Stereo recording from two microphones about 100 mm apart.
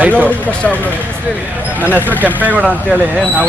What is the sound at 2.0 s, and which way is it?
Speech, 20° left (ahead or behind).